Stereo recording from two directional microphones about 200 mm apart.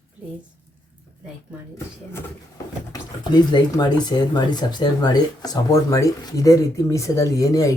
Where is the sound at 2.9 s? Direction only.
20° left (ahead or behind).